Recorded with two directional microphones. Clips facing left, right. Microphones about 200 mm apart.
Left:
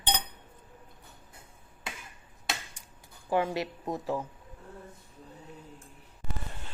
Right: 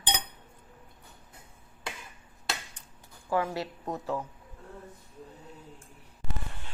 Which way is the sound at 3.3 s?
20° left (ahead or behind).